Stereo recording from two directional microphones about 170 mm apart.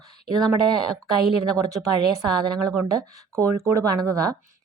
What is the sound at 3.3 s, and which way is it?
Speech, 20° right (ahead or behind).